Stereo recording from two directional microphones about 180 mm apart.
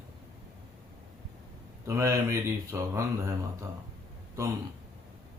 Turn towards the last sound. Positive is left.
turn(degrees=-15)  # may be behind; listen again after turning